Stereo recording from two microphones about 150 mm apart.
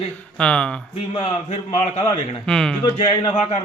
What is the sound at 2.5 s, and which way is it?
Speech, 5° left (ahead or behind).